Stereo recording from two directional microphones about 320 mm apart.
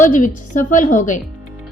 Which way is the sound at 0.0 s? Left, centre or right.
Left.